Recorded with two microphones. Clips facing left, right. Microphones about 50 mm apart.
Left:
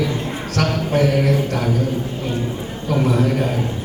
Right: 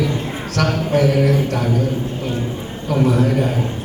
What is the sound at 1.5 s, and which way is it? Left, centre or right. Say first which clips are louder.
Speech: right 1 dB; right.